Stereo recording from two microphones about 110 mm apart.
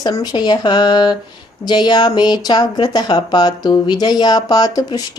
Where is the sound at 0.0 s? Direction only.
40° left (ahead or behind).